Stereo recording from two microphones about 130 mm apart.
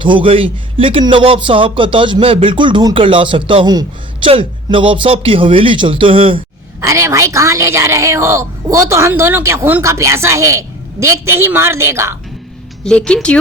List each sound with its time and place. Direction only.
0.0 s speech: 40° right (ahead or behind)
6.8 s speech: 25° right (ahead or behind)
12.8 s speech: 5° left (ahead or behind)